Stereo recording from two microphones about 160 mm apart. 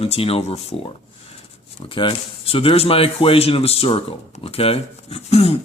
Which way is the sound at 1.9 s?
35° left (ahead or behind).